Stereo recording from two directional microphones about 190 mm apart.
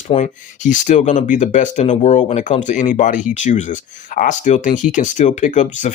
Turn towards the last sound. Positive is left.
turn(degrees=40)  # may be behind; listen again after turning